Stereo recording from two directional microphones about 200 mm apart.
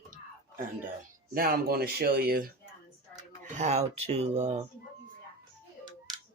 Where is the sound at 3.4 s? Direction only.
35° right (ahead or behind).